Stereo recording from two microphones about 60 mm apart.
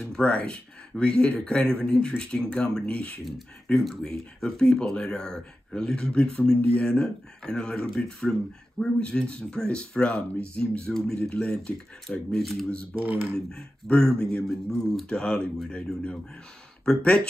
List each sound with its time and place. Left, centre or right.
0.0 s speech: centre
3.8 s speech: centre
12.4 s speech: centre
12.9 s speech: right
13.5 s speech: centre
16.8 s speech: centre